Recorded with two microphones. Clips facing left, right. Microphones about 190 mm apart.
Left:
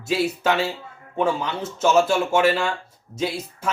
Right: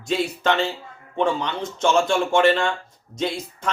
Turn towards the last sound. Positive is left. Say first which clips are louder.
# even
turn(degrees=5)  # may be behind; listen again after turning